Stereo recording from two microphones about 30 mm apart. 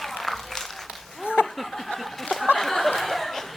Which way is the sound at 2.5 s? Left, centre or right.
Centre.